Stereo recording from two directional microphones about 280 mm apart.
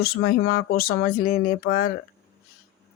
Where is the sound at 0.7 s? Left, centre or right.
Left.